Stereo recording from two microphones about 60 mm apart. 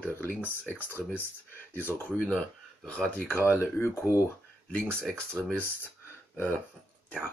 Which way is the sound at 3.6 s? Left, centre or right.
Left.